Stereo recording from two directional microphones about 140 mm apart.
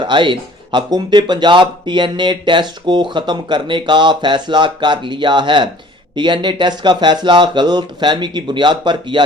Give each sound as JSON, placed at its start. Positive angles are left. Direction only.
{"t": 0.0, "sound": "speech", "side_deg": -35}